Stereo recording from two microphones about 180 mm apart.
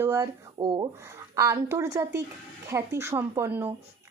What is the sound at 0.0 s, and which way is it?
Speech, 20° right (ahead or behind).